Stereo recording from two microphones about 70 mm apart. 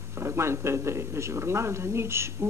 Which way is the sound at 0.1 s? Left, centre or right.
Right.